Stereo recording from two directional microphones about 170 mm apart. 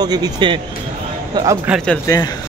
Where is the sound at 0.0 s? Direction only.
25° right (ahead or behind).